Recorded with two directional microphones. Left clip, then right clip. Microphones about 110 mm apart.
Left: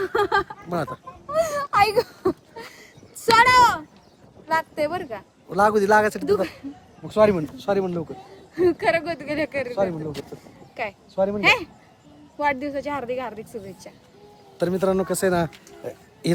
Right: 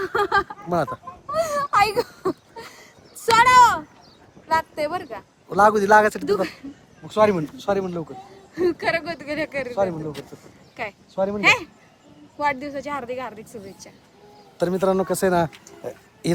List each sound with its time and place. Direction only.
0.0 s speech: 15° left (ahead or behind)
0.7 s speech: centre (ahead or behind)
1.3 s a sound: 30° left (ahead or behind)
4.4 s speech: 25° left (ahead or behind)
5.5 s speech: centre (ahead or behind)
6.2 s speech: 30° left (ahead or behind)
7.1 s speech: 10° left (ahead or behind)
8.1 s speech: 35° left (ahead or behind)
9.7 s speech: 10° left (ahead or behind)
12.4 s speech: 35° left (ahead or behind)
14.6 s speech: 5° left (ahead or behind)